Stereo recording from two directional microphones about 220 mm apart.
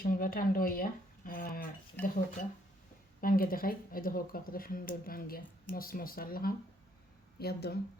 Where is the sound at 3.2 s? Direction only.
40° left (ahead or behind).